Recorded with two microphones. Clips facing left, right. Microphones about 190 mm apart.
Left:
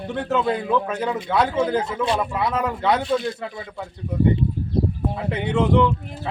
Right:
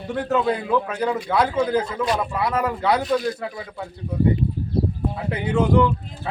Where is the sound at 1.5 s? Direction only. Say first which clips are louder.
Even; 25° left (ahead or behind).